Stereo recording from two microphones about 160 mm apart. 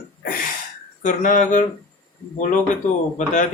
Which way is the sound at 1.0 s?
50° left (ahead or behind).